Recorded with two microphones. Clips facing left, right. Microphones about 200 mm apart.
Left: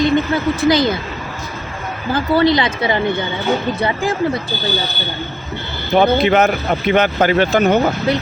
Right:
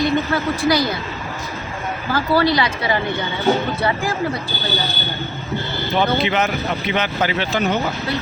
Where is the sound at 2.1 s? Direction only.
20° left (ahead or behind).